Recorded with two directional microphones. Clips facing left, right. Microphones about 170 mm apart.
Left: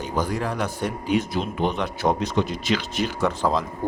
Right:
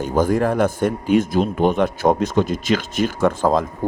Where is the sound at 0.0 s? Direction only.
50° right (ahead or behind).